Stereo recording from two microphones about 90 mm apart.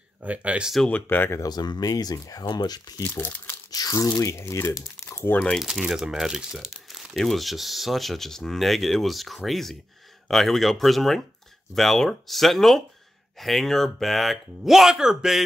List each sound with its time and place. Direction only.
0.2 s speech: 15° right (ahead or behind)
0.8 s speech: 20° left (ahead or behind)
1.4 s speech: 50° left (ahead or behind)
3.0 s speech: 20° left (ahead or behind)
3.7 s speech: 45° left (ahead or behind)
5.0 s crumpling: 25° left (ahead or behind)
5.6 s speech: 5° right (ahead or behind)